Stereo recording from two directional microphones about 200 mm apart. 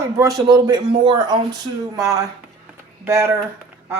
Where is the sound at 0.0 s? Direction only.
15° right (ahead or behind).